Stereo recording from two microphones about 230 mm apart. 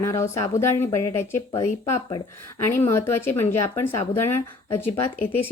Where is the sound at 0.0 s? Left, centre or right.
Centre.